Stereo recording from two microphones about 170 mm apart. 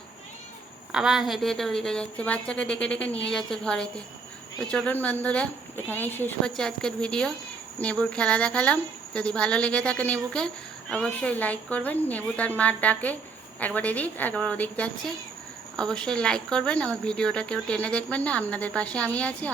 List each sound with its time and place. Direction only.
0.9 s speech: 5° right (ahead or behind)